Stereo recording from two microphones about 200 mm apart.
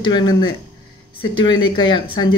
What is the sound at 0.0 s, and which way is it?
A woman's voice, 20° left (ahead or behind).